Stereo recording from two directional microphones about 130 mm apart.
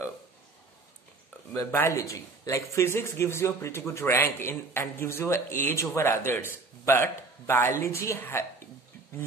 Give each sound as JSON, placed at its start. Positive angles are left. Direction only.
{"t": 1.5, "sound": "a man's voice", "side_deg": 25}